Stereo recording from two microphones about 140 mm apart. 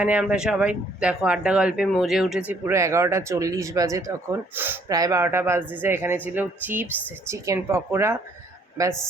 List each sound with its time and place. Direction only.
0.0 s speech: 10° right (ahead or behind)
2.5 s speech: 20° right (ahead or behind)
4.9 s speech: 25° right (ahead or behind)